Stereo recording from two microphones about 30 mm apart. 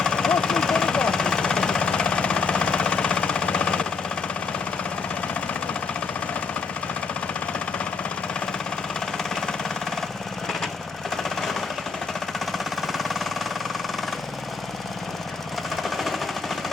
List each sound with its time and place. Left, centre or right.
0.0 s vehicle: left
1.8 s a sound: left
9.1 s engine: centre
11.2 s jackhammer: centre
12.5 s a sound: centre
15.7 s jackhammer: centre